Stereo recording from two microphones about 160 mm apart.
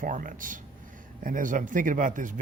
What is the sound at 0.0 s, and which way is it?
Speech, 55° right (ahead or behind).